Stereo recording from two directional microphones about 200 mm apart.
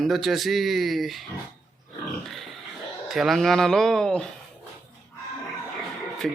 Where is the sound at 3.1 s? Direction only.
Centre (ahead or behind).